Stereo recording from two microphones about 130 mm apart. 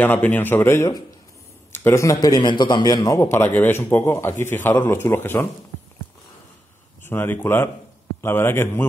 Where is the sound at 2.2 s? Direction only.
35° left (ahead or behind); by 5.5 s 15° left (ahead or behind).